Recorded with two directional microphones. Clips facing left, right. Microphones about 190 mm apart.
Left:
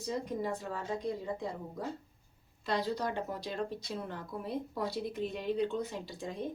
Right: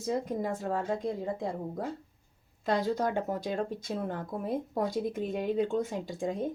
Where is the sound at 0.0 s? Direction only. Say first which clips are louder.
Right 4 dB; 45° right (ahead or behind).